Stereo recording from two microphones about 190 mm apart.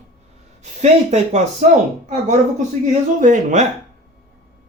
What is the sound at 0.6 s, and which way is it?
Speech, 35° right (ahead or behind).